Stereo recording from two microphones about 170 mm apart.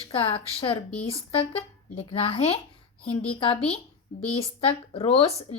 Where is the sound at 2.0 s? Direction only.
35° left (ahead or behind).